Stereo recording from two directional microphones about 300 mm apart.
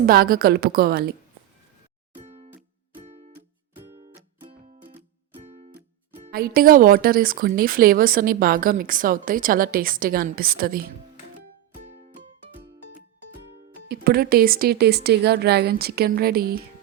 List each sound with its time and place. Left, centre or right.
0.0 s speech: right
2.1 s music: right
3.8 s music: centre
6.3 s speech: right
11.9 s music: right
13.8 s a woman's voice: right